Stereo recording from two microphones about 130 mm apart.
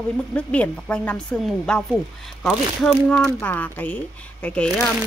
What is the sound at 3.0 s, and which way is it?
A woman's voice, 10° left (ahead or behind).